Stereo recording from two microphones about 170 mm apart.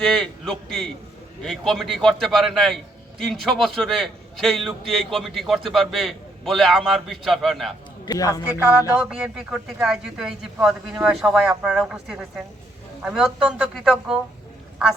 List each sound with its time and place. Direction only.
0.0 s a man's voice: 5° left (ahead or behind)
8.0 s speech: 20° left (ahead or behind)
8.5 s music: 15° right (ahead or behind)
9.0 s a man's voice: 5° right (ahead or behind)